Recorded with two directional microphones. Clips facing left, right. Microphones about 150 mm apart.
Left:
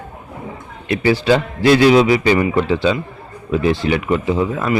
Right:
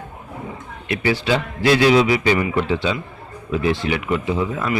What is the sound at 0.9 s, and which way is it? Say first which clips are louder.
A man's voice: left 5 dB; 35° left (ahead or behind).